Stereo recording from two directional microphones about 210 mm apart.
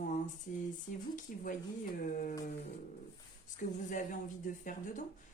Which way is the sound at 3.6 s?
40° left (ahead or behind).